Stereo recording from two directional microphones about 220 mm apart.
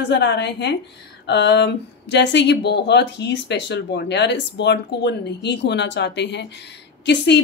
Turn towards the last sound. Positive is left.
turn(degrees=55)  # may be behind; listen again after turning